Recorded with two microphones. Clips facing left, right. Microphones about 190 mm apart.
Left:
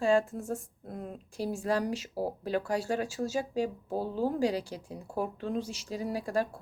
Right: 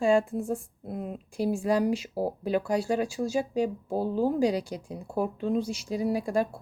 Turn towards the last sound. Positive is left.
turn(degrees=-10)  # may be behind; listen again after turning